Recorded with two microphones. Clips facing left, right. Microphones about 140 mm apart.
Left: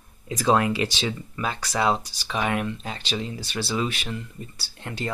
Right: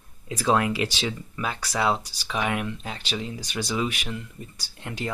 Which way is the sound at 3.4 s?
15° right (ahead or behind).